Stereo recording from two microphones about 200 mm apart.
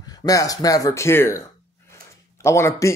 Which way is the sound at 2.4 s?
15° left (ahead or behind).